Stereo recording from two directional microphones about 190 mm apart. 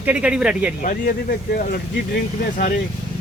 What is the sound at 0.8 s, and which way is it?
Speech, 50° left (ahead or behind).